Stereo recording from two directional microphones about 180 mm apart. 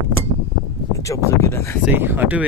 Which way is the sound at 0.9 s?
15° left (ahead or behind).